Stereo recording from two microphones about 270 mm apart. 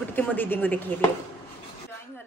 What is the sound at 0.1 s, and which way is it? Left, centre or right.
Speech, centre.